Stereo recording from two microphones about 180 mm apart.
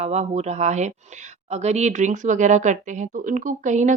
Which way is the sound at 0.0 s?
40° right (ahead or behind).